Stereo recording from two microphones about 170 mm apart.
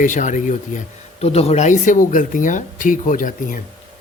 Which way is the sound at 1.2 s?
35° left (ahead or behind).